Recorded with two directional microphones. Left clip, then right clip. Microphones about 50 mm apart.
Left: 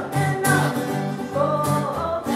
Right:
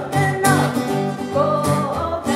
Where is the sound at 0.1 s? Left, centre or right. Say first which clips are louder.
Right 4 dB; right.